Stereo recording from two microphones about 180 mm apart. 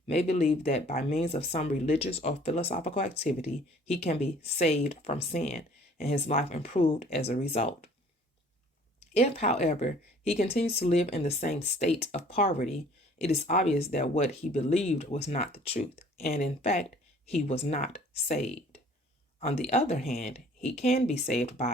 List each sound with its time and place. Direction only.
0.1 s speech: 35° left (ahead or behind)
9.0 s speech: 35° left (ahead or behind)